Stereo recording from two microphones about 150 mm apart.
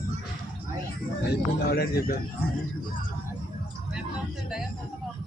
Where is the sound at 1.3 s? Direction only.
90° left.